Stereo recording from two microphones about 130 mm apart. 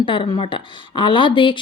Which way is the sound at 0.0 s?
40° left (ahead or behind).